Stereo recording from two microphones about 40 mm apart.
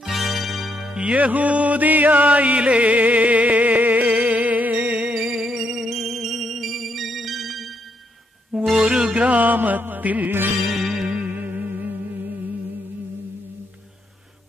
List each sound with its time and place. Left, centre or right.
0.1 s music: centre
0.9 s music: right; by 5.5 s centre
5.5 s music: centre
8.7 s music: right
9.1 s music: right
10.7 s music: centre
11.1 s music: right
11.3 s music: right